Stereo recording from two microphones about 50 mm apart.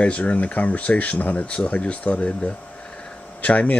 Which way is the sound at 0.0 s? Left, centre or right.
Left.